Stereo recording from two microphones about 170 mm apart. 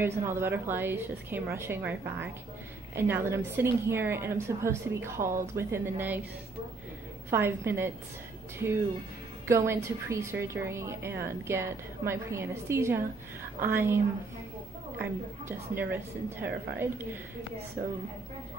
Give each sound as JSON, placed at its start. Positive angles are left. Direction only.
{"t": 0.0, "sound": "a woman's voice", "side_deg": -15}
{"t": 7.2, "sound": "a woman's voice", "side_deg": -15}
{"t": 9.5, "sound": "a woman's voice", "side_deg": -15}